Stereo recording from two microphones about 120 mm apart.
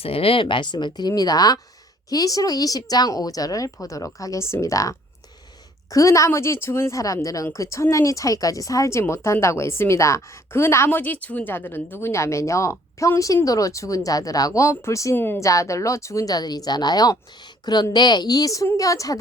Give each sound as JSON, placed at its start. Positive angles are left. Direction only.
{"t": 0.0, "sound": "speech", "side_deg": 55}